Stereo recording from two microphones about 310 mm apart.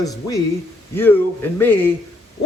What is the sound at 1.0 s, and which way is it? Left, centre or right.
Speech, centre.